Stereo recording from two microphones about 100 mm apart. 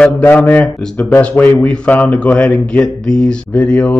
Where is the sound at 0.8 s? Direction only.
5° left (ahead or behind).